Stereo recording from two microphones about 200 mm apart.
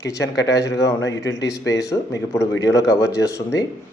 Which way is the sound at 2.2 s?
15° left (ahead or behind).